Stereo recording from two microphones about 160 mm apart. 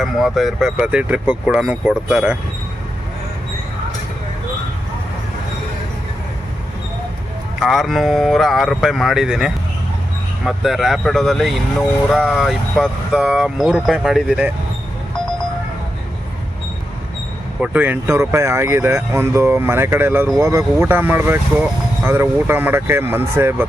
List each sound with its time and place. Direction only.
0.0 s speech: centre (ahead or behind)
7.6 s speech: centre (ahead or behind)
17.6 s speech: 10° right (ahead or behind)